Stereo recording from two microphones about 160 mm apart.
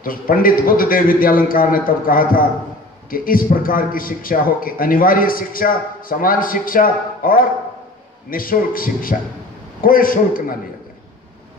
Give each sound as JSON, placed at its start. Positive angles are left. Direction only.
{"t": 0.0, "sound": "a man's voice", "side_deg": 60}